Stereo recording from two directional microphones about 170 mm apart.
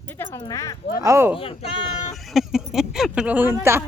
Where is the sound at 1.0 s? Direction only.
15° right (ahead or behind).